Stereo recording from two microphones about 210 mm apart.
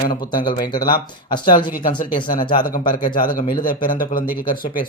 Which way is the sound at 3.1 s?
40° left (ahead or behind).